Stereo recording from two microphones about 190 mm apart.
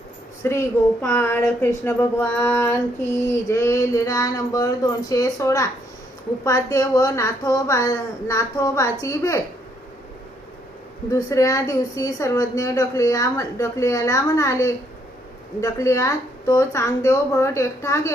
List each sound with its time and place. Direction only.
0.4 s speech: 15° left (ahead or behind)
11.1 s speech: 15° left (ahead or behind)